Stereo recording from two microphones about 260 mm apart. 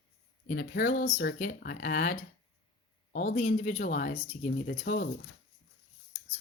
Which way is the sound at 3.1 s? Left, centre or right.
Left.